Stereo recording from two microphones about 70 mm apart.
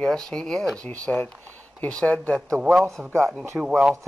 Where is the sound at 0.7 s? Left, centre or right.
Centre.